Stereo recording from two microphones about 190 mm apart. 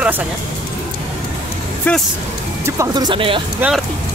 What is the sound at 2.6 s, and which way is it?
Speech, 20° right (ahead or behind).